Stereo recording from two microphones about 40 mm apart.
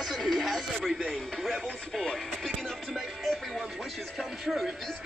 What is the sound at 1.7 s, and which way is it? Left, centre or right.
Speech, centre.